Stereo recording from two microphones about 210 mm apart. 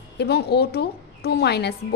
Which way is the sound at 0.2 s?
50° left (ahead or behind).